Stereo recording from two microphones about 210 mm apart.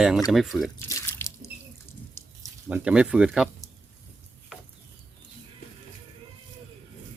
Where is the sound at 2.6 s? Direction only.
5° right (ahead or behind).